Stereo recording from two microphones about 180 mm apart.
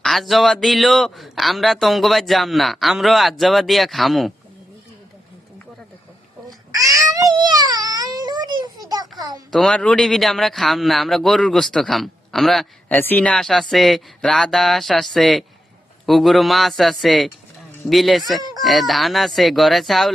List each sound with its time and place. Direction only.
0.0 s a man's voice: centre (ahead or behind)
6.7 s a sound: 20° right (ahead or behind)
9.5 s a man's voice: centre (ahead or behind)